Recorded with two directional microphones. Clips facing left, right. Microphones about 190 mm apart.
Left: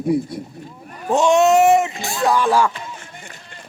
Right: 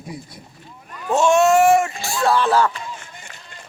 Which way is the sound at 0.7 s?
40° left (ahead or behind).